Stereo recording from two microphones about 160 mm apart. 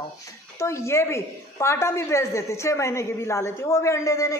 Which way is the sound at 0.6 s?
15° left (ahead or behind).